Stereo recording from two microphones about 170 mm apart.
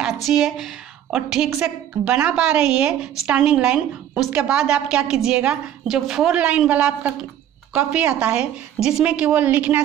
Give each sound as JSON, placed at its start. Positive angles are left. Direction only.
{"t": 0.0, "sound": "a woman's voice", "side_deg": 0}